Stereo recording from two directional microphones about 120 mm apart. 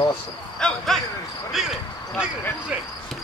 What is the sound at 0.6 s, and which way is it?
Speech, 5° left (ahead or behind).